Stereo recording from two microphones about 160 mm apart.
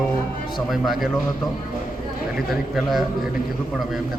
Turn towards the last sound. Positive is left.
turn(degrees=0)  # may be behind; listen again after turning